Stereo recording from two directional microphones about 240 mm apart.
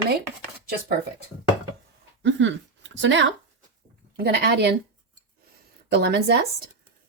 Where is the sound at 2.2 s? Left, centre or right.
Right.